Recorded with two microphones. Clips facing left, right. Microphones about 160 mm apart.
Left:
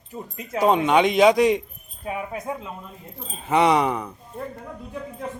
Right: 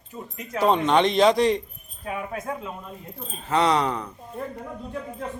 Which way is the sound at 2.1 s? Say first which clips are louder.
Left 1 dB; 20° left (ahead or behind).